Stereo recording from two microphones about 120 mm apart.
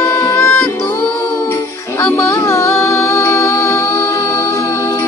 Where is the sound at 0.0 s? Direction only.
25° left (ahead or behind).